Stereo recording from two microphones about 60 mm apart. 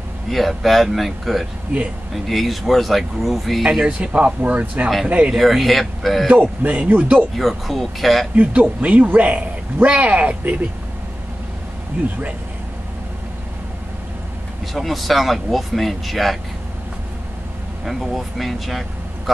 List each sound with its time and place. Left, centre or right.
0.3 s speech: centre
3.7 s speech: centre
5.3 s speech: centre
6.2 s a man's voice: centre
7.3 s speech: centre
8.4 s speech: right
14.7 s speech: centre
17.8 s speech: centre